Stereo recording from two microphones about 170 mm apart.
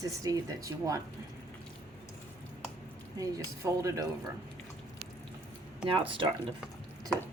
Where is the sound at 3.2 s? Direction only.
20° right (ahead or behind).